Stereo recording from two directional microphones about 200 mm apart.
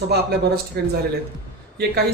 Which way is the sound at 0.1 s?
55° right (ahead or behind).